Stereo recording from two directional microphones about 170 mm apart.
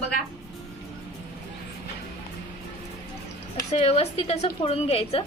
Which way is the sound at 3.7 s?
40° left (ahead or behind).